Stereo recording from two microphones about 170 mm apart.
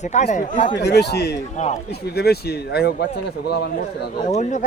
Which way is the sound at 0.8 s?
75° left (ahead or behind).